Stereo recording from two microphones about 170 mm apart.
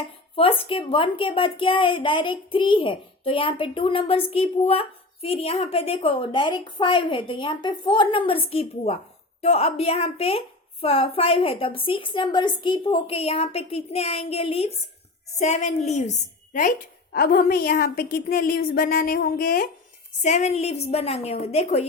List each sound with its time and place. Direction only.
0.0 s a woman's voice: 35° left (ahead or behind); by 19.7 s 55° left (ahead or behind)
20.2 s speech: 45° left (ahead or behind)